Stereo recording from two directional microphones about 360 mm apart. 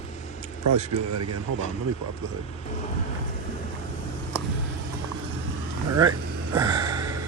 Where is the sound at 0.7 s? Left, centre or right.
Right.